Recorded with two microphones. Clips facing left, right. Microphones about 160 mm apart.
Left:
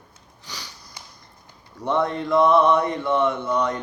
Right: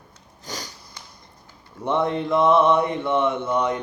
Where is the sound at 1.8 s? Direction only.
20° right (ahead or behind).